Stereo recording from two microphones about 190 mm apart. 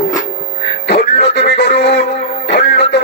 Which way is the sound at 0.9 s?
65° left (ahead or behind).